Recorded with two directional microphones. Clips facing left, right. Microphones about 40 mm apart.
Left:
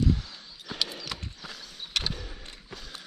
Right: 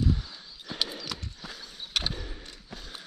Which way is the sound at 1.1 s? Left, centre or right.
Centre.